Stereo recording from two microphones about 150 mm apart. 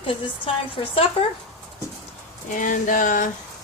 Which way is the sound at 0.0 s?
35° left (ahead or behind).